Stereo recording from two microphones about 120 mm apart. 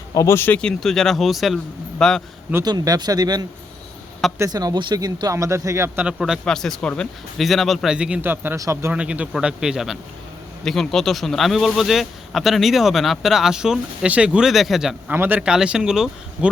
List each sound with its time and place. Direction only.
0.1 s a man's voice: 25° left (ahead or behind); by 2.2 s 5° left (ahead or behind)
2.6 s speech: 35° right (ahead or behind)
6.1 s a man's voice: 5° right (ahead or behind); by 8.9 s 25° right (ahead or behind)
8.9 s a man's voice: 10° right (ahead or behind)
15.1 s a man's voice: 15° right (ahead or behind)